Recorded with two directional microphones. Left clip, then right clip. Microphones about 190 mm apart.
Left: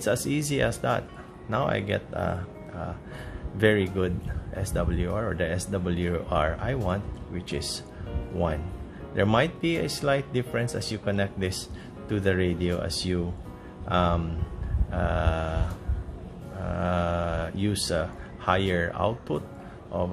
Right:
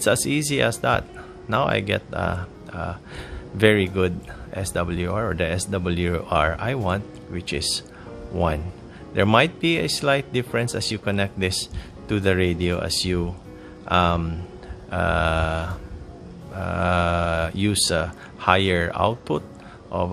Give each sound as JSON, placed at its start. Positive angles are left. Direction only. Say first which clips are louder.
{"t": 0.0, "sound": "speech", "louder": "right 6 dB", "side_deg": -35}
{"t": 9.1, "sound": "speech", "louder": "right 6 dB", "side_deg": -35}